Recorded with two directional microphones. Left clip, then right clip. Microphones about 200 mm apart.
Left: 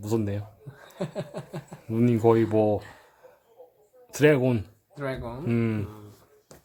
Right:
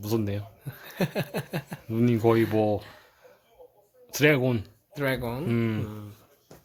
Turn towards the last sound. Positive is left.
turn(degrees=10)  # may be behind; listen again after turning